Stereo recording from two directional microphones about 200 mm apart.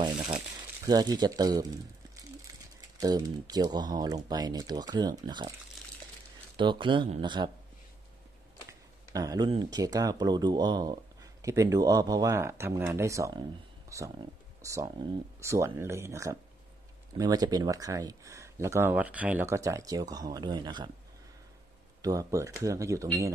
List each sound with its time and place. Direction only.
0.8 s speech: 20° right (ahead or behind)
3.0 s speech: 20° right (ahead or behind)
6.5 s speech: 25° right (ahead or behind)
9.1 s speech: 20° right (ahead or behind)
13.8 s a sound: 15° right (ahead or behind)
14.6 s speech: 15° right (ahead or behind)
22.0 s speech: 15° right (ahead or behind)